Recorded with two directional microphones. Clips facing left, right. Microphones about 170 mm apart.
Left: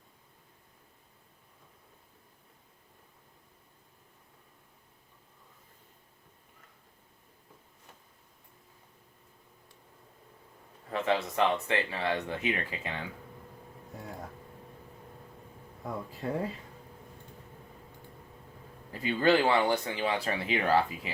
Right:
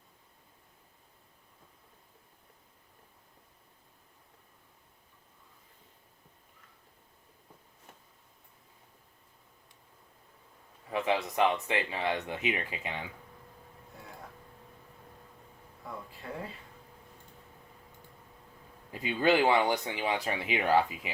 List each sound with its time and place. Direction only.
10.8 s speech: 10° right (ahead or behind)
16.2 s speech: 40° left (ahead or behind)
18.9 s speech: 15° right (ahead or behind)